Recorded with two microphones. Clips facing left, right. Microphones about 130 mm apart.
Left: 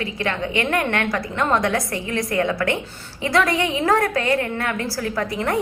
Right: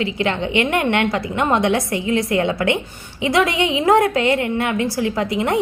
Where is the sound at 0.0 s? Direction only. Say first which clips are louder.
Right 4 dB; 25° right (ahead or behind).